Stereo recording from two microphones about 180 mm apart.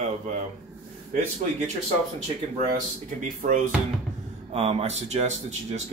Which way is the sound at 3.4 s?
45° right (ahead or behind).